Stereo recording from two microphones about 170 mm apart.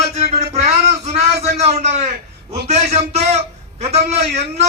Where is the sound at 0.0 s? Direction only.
40° right (ahead or behind).